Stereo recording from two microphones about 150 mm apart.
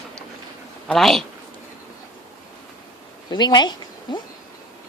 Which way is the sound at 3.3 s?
30° left (ahead or behind).